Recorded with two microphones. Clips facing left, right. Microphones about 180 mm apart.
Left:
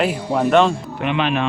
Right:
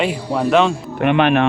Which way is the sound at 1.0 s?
55° right (ahead or behind).